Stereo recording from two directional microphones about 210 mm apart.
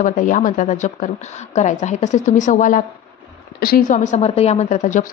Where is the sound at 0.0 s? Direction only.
40° left (ahead or behind).